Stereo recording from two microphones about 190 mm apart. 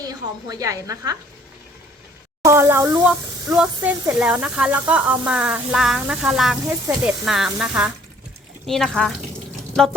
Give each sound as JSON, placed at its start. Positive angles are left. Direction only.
{"t": 0.0, "sound": "a woman's voice", "side_deg": -20}
{"t": 2.4, "sound": "speech", "side_deg": -15}
{"t": 3.1, "sound": "speech", "side_deg": -5}